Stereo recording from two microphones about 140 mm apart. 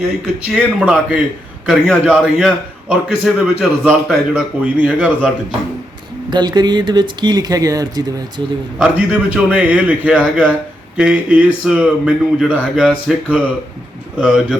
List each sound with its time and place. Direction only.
0.5 s a man's voice: 5° right (ahead or behind)
6.3 s speech: 30° right (ahead or behind)
8.8 s a man's voice: 10° right (ahead or behind)